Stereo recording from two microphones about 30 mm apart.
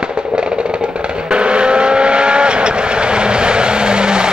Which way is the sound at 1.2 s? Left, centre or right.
Right.